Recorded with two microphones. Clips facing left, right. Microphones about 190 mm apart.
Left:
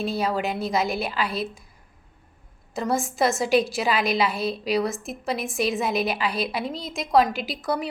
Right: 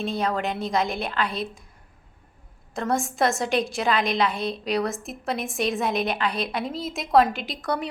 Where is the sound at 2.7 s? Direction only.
Centre (ahead or behind).